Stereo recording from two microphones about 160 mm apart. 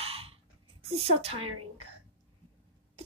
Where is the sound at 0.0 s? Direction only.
40° right (ahead or behind).